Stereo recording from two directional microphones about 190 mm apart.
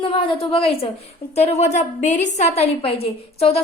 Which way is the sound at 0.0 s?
25° left (ahead or behind).